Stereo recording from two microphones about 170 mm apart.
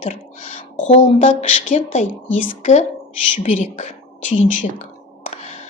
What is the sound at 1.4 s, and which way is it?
A woman's voice, 45° left (ahead or behind).